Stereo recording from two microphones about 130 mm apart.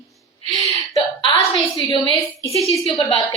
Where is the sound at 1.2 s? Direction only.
40° left (ahead or behind).